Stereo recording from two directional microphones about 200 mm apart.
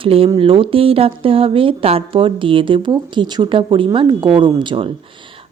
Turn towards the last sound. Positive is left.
turn(degrees=-25)  # may be behind; listen again after turning